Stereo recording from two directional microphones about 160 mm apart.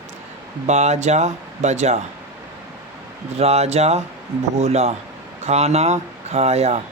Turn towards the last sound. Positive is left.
turn(degrees=-40)  # may be behind; listen again after turning